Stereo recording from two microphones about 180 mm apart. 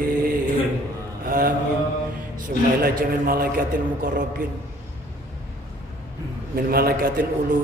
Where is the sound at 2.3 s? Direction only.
55° right (ahead or behind).